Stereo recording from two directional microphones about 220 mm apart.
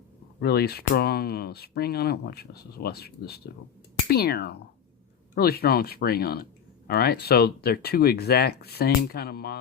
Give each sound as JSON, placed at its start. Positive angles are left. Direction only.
{"t": 0.3, "sound": "speech", "side_deg": 45}